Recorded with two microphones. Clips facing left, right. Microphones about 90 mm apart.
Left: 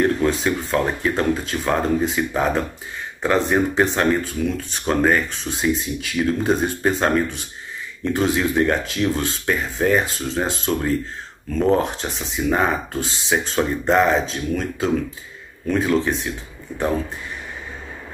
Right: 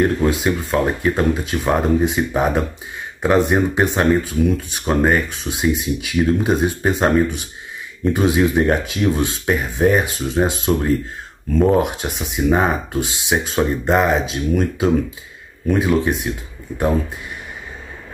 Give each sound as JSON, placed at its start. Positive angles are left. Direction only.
{"t": 0.0, "sound": "speech", "side_deg": -10}